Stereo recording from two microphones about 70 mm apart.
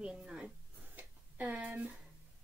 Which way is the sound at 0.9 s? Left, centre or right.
Right.